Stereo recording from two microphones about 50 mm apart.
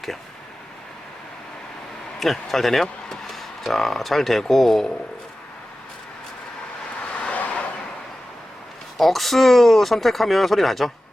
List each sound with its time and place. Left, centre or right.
2.1 s speech: centre
7.2 s vehicle: left
9.0 s speech: centre